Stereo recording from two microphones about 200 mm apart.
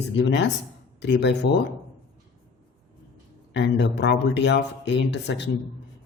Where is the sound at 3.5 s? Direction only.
60° left (ahead or behind).